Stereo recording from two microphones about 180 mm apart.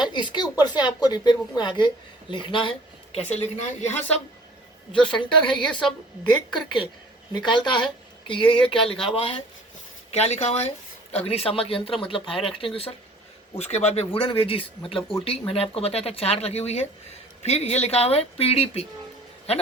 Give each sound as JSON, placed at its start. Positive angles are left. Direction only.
{"t": 0.0, "sound": "a woman's voice", "side_deg": 25}
{"t": 4.9, "sound": "a woman's voice", "side_deg": 25}